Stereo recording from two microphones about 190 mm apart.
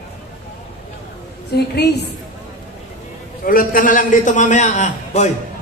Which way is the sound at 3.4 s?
50° left (ahead or behind).